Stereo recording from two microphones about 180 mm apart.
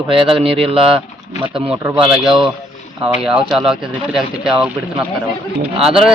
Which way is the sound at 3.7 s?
5° right (ahead or behind).